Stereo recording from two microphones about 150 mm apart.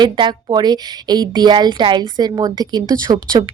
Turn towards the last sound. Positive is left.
turn(degrees=-25)  # may be behind; listen again after turning